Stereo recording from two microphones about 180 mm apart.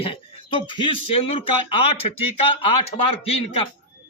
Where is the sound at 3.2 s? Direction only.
30° left (ahead or behind).